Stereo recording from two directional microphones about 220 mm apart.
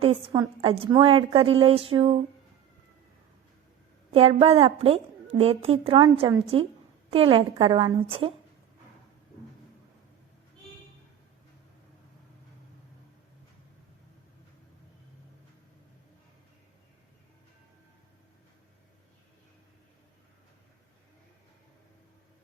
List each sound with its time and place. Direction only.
0.0 s a woman's voice: 25° right (ahead or behind)
4.1 s a woman's voice: 25° right (ahead or behind)